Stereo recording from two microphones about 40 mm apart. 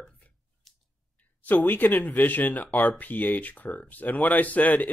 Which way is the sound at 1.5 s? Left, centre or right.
Left.